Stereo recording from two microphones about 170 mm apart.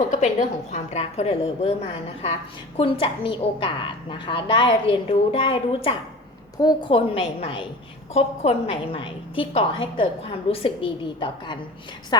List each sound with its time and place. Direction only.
0.1 s a woman's voice: 40° left (ahead or behind)
2.7 s a woman's voice: 30° left (ahead or behind)